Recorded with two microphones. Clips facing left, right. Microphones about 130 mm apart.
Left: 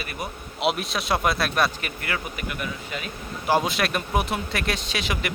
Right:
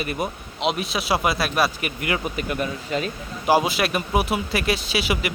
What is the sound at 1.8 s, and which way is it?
Speech, 15° right (ahead or behind).